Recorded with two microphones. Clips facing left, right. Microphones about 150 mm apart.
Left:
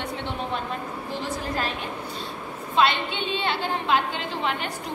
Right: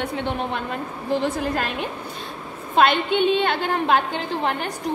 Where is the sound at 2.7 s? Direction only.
55° right (ahead or behind).